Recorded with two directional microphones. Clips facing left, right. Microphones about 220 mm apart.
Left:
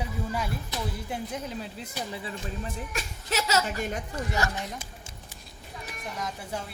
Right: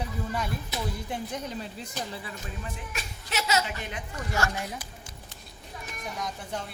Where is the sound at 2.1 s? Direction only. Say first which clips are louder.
Left 3 dB; 25° left (ahead or behind).